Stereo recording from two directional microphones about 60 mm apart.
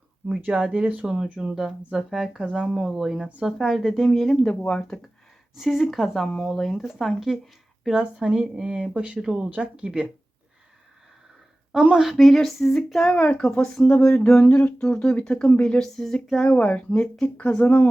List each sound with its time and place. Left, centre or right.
0.4 s speech: centre
4.6 s speech: left
5.5 s speech: centre
7.9 s speech: centre
11.7 s speech: centre
12.1 s speech: centre
13.1 s speech: left
13.4 s speech: centre; by 17.8 s left